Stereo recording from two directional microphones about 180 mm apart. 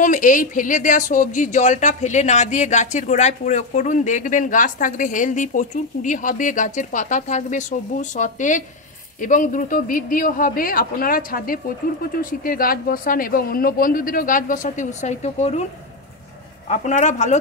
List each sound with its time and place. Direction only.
0.0 s speech: 45° left (ahead or behind)
16.6 s a man's voice: 40° left (ahead or behind)